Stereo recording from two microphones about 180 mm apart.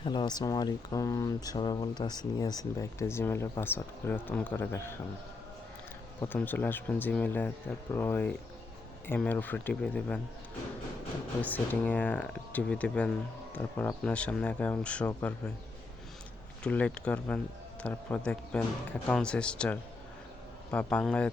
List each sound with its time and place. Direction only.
0.0 s speech: 25° left (ahead or behind)
6.2 s speech: 10° left (ahead or behind)
11.3 s speech: 10° left (ahead or behind)
16.6 s speech: 5° left (ahead or behind)